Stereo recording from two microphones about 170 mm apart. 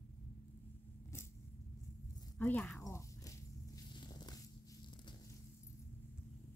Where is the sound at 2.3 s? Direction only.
10° left (ahead or behind).